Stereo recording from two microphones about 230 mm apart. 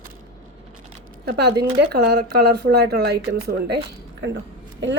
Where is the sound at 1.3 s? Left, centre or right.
Right.